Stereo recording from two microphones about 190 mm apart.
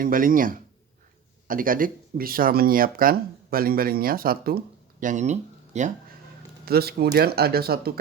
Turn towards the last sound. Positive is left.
turn(degrees=-55)  # may be behind; listen again after turning